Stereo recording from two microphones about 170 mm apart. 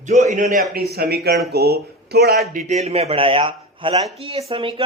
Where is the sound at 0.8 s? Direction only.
65° right (ahead or behind).